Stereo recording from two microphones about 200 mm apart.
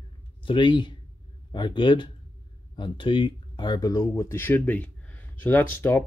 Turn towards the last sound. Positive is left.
turn(degrees=10)  # may be behind; listen again after turning